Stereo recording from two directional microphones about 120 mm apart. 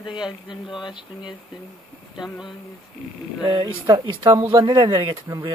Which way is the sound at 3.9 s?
35° right (ahead or behind).